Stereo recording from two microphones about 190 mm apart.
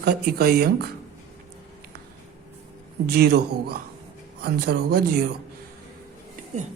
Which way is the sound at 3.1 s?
55° right (ahead or behind).